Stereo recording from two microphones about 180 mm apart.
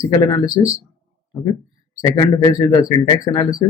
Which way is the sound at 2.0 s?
20° left (ahead or behind).